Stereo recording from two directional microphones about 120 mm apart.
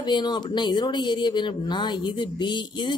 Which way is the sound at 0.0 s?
40° left (ahead or behind).